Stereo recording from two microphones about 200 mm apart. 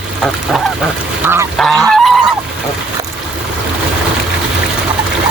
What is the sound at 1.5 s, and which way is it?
Goose, centre (ahead or behind).